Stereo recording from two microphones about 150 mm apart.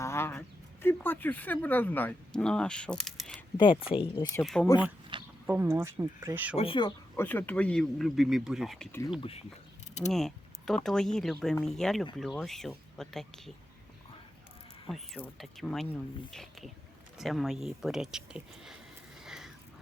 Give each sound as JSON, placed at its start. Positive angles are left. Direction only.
{"t": 0.0, "sound": "speech", "side_deg": 15}
{"t": 3.6, "sound": "speech", "side_deg": 35}
{"t": 4.4, "sound": "speech", "side_deg": 0}
{"t": 5.1, "sound": "a sound", "side_deg": -30}
{"t": 5.5, "sound": "speech", "side_deg": -15}
{"t": 6.6, "sound": "speech", "side_deg": 35}
{"t": 7.2, "sound": "speech", "side_deg": 10}
{"t": 10.1, "sound": "mechanisms", "side_deg": 0}
{"t": 10.8, "sound": "speech", "side_deg": 5}
{"t": 14.8, "sound": "speech", "side_deg": 0}
{"t": 19.2, "sound": "a sound", "side_deg": -5}